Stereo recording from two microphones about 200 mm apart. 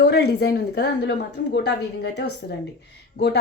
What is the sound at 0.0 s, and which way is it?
A woman's voice, 55° left (ahead or behind).